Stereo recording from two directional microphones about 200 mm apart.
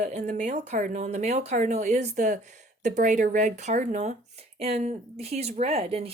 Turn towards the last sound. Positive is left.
turn(degrees=-30)  # may be behind; listen again after turning